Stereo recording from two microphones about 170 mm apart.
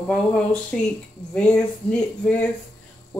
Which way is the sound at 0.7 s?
Centre (ahead or behind).